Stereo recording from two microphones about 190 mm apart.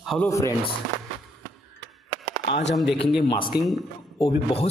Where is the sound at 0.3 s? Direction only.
15° left (ahead or behind).